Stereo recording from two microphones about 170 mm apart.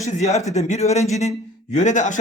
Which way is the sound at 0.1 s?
40° left (ahead or behind).